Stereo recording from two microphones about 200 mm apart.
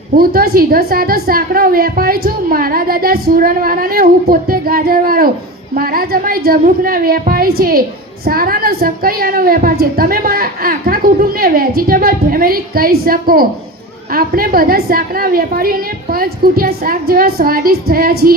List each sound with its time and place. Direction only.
0.2 s a woman's voice: 50° right (ahead or behind)